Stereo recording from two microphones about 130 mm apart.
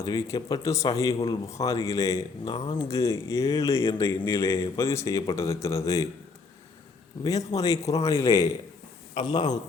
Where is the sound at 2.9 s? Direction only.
20° left (ahead or behind).